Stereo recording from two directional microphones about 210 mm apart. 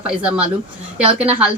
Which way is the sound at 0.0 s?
5° right (ahead or behind).